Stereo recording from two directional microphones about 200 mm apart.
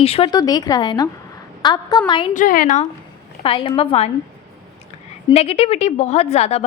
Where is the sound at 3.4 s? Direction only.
25° left (ahead or behind).